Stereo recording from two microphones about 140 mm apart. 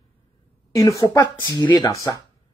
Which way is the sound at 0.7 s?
25° left (ahead or behind).